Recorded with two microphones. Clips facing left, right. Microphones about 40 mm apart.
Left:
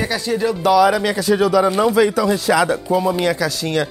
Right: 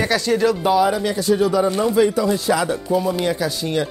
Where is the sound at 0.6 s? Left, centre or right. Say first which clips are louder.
Left 3 dB; left.